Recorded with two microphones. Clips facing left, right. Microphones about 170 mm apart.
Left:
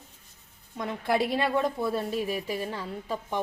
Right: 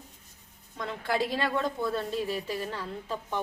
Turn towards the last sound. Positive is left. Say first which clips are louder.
# left 2 dB
turn(degrees=15)  # may be behind; listen again after turning